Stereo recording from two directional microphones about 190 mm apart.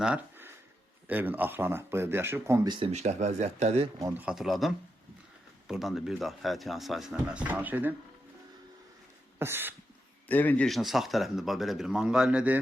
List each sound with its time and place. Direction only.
0.0 s a sound: 10° right (ahead or behind)
1.0 s speech: 10° right (ahead or behind)
2.6 s speech: 25° right (ahead or behind)
4.2 s speech: 5° right (ahead or behind)
9.4 s speech: 10° right (ahead or behind)
10.2 s speech: 10° left (ahead or behind)